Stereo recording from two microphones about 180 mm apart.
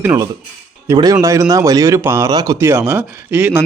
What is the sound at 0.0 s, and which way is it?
Speech, 10° right (ahead or behind).